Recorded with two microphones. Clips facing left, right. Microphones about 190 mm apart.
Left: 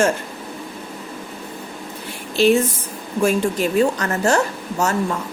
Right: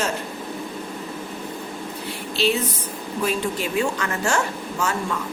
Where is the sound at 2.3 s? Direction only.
45° left (ahead or behind).